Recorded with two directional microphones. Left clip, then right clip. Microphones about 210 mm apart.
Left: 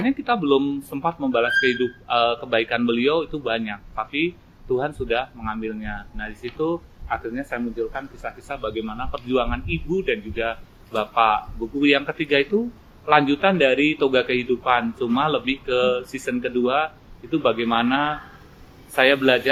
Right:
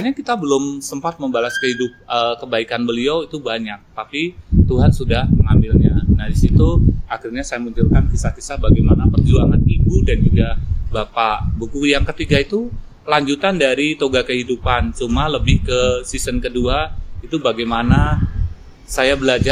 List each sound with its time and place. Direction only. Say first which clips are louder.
0.0 s a man's voice: right 2 dB; 20° right (ahead or behind)